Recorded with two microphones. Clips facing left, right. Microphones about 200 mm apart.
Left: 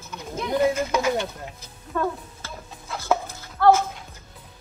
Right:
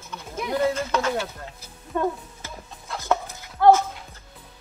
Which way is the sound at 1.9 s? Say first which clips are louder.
Right 1 dB; 15° right (ahead or behind).